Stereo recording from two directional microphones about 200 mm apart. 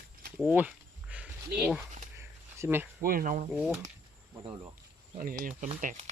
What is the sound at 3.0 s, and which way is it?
Insect, 45° right (ahead or behind).